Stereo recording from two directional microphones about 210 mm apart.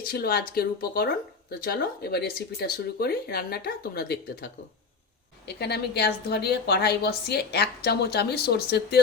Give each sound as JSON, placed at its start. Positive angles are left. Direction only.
{"t": 0.0, "sound": "a woman's voice", "side_deg": 45}
{"t": 5.5, "sound": "a woman's voice", "side_deg": 50}